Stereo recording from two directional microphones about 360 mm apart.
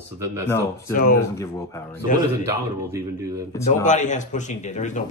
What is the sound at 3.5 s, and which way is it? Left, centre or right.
Speech, centre.